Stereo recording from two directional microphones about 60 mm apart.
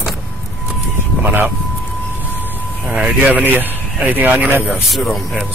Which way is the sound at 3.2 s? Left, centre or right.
Right.